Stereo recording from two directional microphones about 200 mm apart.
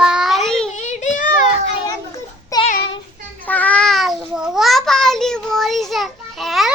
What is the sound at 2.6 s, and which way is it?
Child singing, 45° left (ahead or behind).